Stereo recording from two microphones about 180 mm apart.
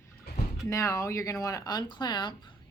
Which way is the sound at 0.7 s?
20° left (ahead or behind).